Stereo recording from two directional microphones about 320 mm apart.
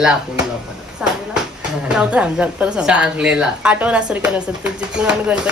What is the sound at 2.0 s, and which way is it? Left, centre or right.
A woman's voice, centre.